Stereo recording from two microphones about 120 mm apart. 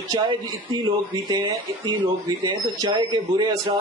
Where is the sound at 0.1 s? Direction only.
40° right (ahead or behind).